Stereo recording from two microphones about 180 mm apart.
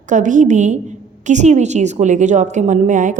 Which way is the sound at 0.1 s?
45° right (ahead or behind).